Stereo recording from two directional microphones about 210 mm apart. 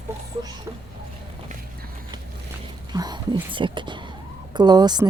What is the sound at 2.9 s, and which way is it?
A woman's voice, 20° right (ahead or behind).